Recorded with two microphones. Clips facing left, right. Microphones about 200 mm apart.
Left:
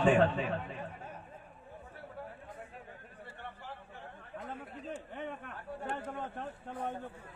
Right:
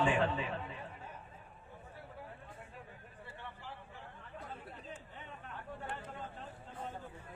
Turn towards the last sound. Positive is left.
turn(degrees=65)  # may be behind; listen again after turning